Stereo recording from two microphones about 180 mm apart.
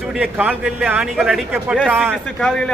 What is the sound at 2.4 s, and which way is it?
Speech, 5° left (ahead or behind).